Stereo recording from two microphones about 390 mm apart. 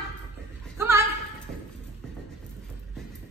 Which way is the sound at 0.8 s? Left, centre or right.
Centre.